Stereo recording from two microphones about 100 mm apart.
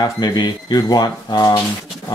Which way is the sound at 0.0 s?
45° left (ahead or behind).